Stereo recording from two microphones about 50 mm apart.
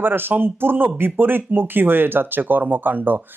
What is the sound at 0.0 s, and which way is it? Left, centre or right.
A man's voice, right.